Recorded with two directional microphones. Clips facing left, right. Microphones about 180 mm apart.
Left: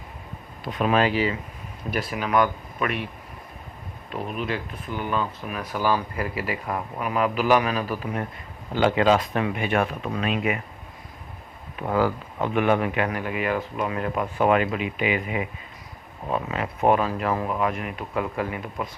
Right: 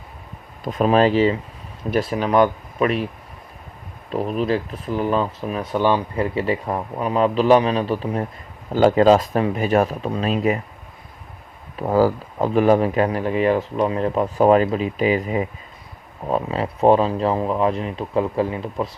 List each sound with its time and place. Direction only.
0.6 s speech: 40° right (ahead or behind)
4.1 s speech: 35° right (ahead or behind)
8.7 s speech: 40° right (ahead or behind)
11.8 s speech: 35° right (ahead or behind)